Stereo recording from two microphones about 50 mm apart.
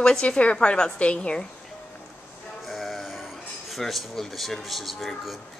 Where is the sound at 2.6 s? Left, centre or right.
Centre.